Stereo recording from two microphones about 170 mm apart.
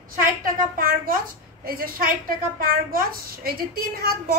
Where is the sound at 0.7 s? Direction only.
55° right (ahead or behind).